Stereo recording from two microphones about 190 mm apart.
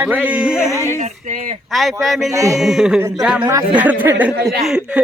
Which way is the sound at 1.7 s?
Centre (ahead or behind).